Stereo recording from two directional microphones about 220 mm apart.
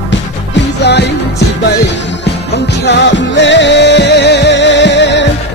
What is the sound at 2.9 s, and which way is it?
Music, 55° left (ahead or behind).